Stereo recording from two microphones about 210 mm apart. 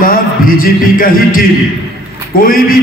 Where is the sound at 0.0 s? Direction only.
40° left (ahead or behind).